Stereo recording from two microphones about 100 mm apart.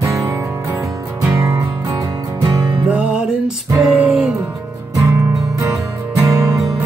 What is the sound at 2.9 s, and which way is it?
Music, 15° right (ahead or behind).